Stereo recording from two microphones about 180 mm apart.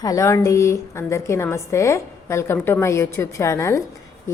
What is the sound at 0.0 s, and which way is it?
A woman's voice, 20° left (ahead or behind).